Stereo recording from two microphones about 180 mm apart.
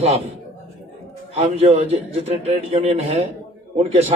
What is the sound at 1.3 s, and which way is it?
A man's voice, 35° right (ahead or behind).